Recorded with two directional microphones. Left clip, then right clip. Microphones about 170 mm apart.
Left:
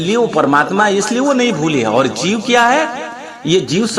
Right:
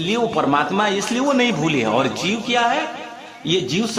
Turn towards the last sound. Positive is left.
turn(degrees=35)  # may be behind; listen again after turning